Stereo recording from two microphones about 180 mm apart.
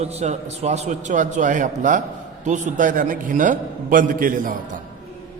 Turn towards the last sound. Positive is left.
turn(degrees=-50)  # may be behind; listen again after turning